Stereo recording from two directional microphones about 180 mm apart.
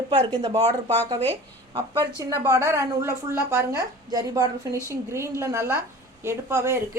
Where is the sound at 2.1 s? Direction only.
20° right (ahead or behind).